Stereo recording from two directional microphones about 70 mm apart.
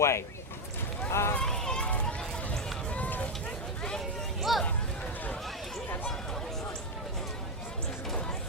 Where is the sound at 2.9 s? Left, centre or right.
Left.